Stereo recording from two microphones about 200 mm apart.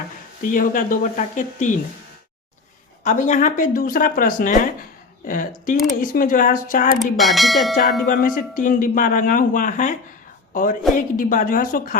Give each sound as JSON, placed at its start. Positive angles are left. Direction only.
{"t": 0.4, "sound": "a woman's voice", "side_deg": 40}
{"t": 3.0, "sound": "speech", "side_deg": 40}
{"t": 7.0, "sound": "speech", "side_deg": 0}
{"t": 8.0, "sound": "a woman's voice", "side_deg": 45}